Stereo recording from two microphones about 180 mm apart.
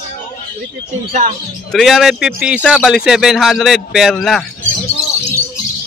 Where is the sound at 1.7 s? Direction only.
Centre (ahead or behind).